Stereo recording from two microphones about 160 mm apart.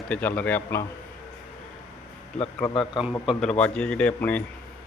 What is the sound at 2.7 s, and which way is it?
Speech, 30° left (ahead or behind).